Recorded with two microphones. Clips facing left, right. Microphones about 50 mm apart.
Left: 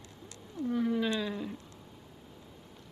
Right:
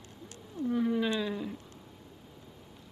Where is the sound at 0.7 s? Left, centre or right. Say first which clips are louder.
Right 1 dB; centre.